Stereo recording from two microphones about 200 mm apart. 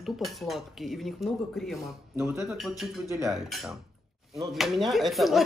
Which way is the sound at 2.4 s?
Centre (ahead or behind).